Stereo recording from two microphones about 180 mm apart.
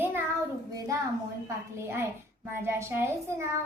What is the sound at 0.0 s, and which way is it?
Child singing, 10° right (ahead or behind).